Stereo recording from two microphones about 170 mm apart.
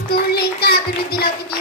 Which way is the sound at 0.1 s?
65° left (ahead or behind).